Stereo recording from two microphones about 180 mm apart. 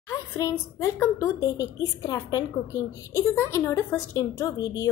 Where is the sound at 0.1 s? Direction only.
20° left (ahead or behind).